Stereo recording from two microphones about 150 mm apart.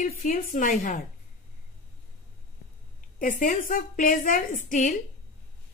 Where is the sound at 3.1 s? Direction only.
65° left (ahead or behind).